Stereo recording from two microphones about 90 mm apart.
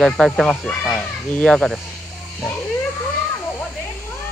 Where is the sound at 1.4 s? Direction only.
Centre (ahead or behind).